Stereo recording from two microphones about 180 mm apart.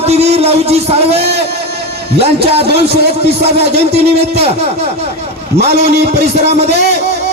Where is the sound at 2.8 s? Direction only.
65° right (ahead or behind).